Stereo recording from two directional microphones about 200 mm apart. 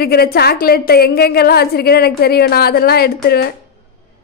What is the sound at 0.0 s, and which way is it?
A woman's voice, 50° left (ahead or behind).